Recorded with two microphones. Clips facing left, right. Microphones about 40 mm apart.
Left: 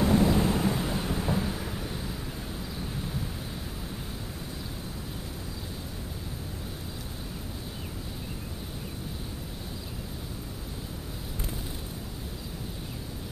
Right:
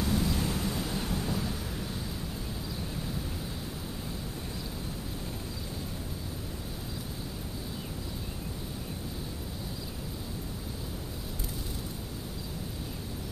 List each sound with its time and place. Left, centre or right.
0.0 s vehicle: left